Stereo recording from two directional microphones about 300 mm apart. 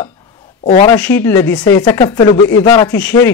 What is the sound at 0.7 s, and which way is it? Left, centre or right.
Speech, centre.